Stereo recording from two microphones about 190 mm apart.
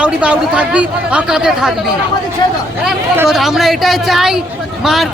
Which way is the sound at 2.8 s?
Centre (ahead or behind).